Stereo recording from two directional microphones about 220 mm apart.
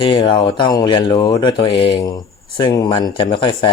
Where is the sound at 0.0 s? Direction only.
20° left (ahead or behind).